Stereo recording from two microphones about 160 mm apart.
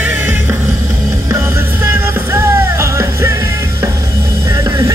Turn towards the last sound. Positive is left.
turn(degrees=-20)  # may be behind; listen again after turning